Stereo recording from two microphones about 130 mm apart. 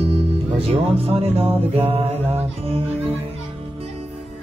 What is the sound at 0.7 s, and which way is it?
Music, 50° right (ahead or behind).